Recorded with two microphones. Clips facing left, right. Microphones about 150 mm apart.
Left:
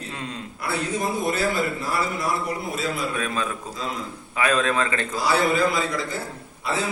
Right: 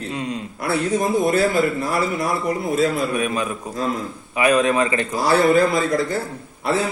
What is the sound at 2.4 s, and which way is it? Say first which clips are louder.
Speech: right 8 dB; 50° right (ahead or behind).